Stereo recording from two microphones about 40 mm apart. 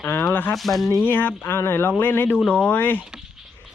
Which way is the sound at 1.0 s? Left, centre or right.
Left.